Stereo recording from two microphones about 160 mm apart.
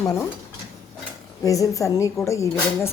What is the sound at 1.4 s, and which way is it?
A woman's voice, 20° left (ahead or behind).